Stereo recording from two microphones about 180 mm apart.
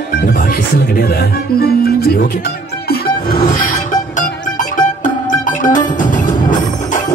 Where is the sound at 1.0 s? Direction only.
60° left (ahead or behind).